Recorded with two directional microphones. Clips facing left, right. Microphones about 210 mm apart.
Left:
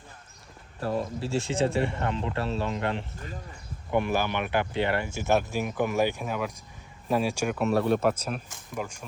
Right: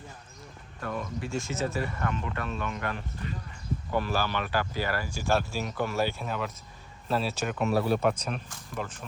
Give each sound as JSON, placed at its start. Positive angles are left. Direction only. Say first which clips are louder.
{"t": 0.8, "sound": "speech", "louder": "left 5 dB", "side_deg": 35}